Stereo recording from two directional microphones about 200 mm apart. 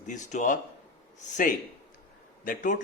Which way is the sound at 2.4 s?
40° left (ahead or behind).